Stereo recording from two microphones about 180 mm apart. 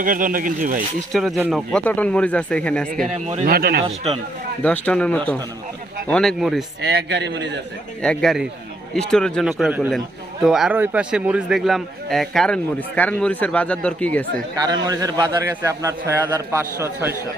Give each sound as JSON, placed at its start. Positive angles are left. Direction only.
{"t": 0.0, "sound": "speech", "side_deg": -50}
{"t": 1.1, "sound": "a man's voice", "side_deg": 0}
{"t": 3.4, "sound": "a man's voice", "side_deg": -55}
{"t": 3.8, "sound": "speech", "side_deg": -35}
{"t": 4.6, "sound": "a man's voice", "side_deg": 5}
{"t": 6.8, "sound": "a man's voice", "side_deg": -70}
{"t": 8.0, "sound": "a man's voice", "side_deg": 5}
{"t": 14.5, "sound": "a man's voice", "side_deg": -20}